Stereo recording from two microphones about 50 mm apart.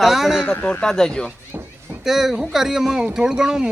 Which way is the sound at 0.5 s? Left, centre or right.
Left.